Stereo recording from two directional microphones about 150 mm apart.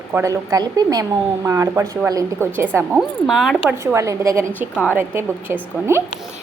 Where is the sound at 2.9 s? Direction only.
Centre (ahead or behind).